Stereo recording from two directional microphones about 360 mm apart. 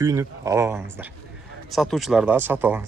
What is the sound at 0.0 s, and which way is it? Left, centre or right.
Speech, centre.